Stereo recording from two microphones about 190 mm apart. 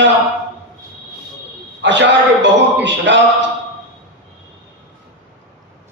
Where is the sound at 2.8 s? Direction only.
70° right (ahead or behind).